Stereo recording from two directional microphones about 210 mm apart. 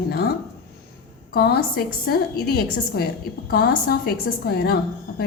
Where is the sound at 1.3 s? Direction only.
50° left (ahead or behind).